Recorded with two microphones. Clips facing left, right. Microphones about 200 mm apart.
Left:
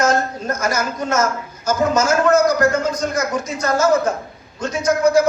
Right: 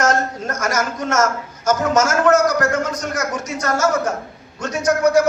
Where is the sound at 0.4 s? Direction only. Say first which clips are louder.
Left 1 dB; 90° right.